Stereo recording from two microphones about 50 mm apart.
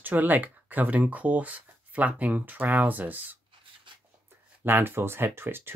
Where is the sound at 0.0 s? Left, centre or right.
Right.